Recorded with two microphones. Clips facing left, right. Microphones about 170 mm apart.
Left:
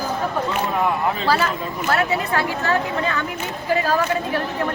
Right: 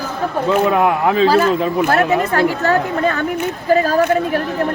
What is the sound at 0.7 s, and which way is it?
Speech, 75° right (ahead or behind).